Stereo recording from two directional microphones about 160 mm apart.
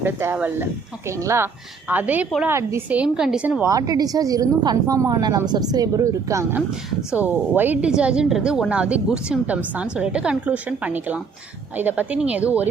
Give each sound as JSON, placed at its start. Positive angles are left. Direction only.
{"t": 0.0, "sound": "a woman's voice", "side_deg": -15}
{"t": 3.6, "sound": "a woman's voice", "side_deg": -20}
{"t": 6.7, "sound": "a woman's voice", "side_deg": -10}